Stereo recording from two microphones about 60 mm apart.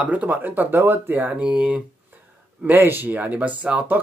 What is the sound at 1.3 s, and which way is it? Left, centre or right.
Speech, centre.